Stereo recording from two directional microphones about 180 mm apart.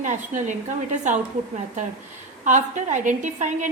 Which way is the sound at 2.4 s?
45° right (ahead or behind).